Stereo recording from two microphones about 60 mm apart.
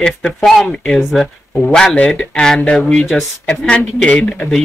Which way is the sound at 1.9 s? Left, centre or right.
Centre.